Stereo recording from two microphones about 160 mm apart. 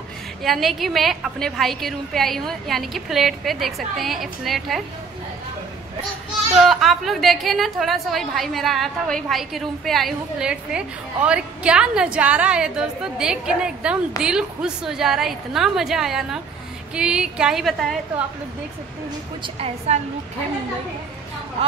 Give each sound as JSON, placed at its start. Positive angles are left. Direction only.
{"t": 0.4, "sound": "a woman's voice", "side_deg": 0}
{"t": 6.5, "sound": "a woman's voice", "side_deg": 0}
{"t": 19.4, "sound": "a woman's voice", "side_deg": -35}